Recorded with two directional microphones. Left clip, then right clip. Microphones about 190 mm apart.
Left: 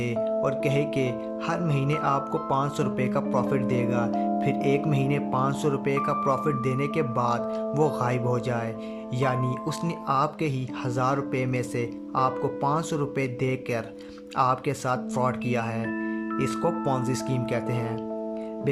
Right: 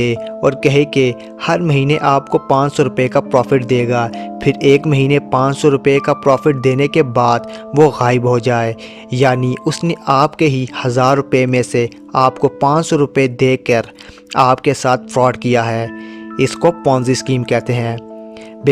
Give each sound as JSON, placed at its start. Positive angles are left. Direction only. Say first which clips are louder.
{"t": 0.0, "sound": "speech", "louder": "right 10 dB", "side_deg": -50}